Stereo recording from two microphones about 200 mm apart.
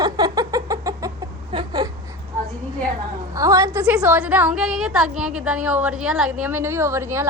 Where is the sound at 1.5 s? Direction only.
25° right (ahead or behind).